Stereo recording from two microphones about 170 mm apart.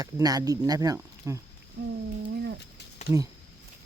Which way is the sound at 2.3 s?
70° right (ahead or behind).